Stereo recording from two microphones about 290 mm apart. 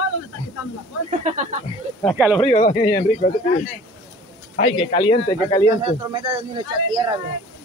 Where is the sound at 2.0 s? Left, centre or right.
Centre.